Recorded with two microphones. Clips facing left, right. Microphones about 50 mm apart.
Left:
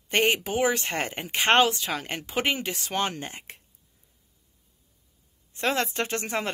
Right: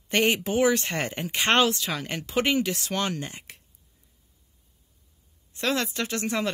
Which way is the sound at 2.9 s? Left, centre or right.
Left.